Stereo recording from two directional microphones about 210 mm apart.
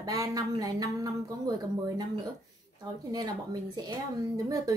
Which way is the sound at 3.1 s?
15° right (ahead or behind).